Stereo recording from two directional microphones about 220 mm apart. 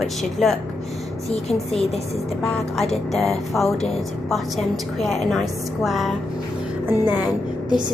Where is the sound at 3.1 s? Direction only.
Centre (ahead or behind).